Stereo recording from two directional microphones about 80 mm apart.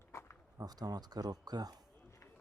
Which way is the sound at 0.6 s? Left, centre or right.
Right.